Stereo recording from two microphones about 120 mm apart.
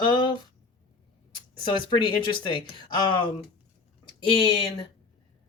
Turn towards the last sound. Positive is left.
turn(degrees=45)  # may be behind; listen again after turning